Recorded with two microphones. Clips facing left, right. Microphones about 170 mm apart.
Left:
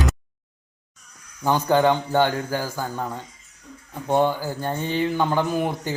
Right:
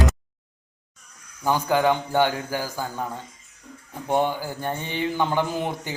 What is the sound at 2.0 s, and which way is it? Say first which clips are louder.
Speech: left 1 dB; 15° right (ahead or behind).